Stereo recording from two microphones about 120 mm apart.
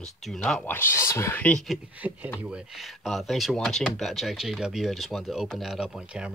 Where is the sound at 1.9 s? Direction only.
15° right (ahead or behind).